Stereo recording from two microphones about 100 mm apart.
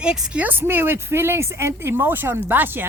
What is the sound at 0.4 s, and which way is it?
Speech, 20° right (ahead or behind).